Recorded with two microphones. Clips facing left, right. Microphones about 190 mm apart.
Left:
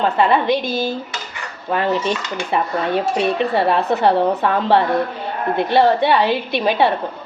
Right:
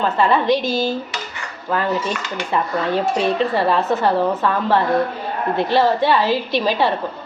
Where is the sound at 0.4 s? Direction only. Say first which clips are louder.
Right 1 dB; 55° left (ahead or behind).